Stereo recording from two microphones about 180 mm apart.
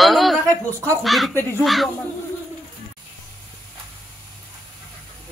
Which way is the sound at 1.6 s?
Centre (ahead or behind).